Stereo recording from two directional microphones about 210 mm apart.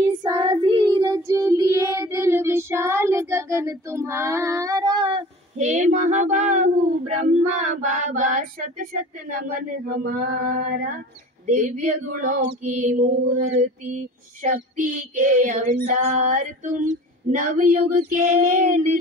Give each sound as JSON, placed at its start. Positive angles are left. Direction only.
{"t": 0.2, "sound": "child singing", "side_deg": -20}
{"t": 5.6, "sound": "child singing", "side_deg": -35}